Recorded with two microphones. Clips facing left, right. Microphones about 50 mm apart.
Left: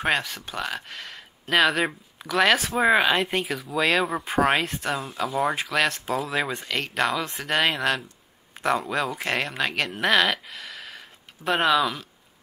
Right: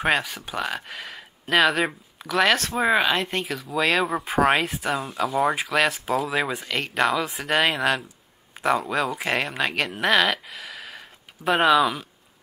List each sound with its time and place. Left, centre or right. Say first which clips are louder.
0.0 s speech: right 2 dB; centre